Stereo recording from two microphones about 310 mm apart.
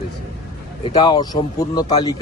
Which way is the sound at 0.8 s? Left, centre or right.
Centre.